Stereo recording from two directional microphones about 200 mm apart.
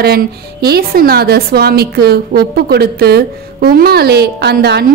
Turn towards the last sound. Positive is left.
turn(degrees=-55)  # may be behind; listen again after turning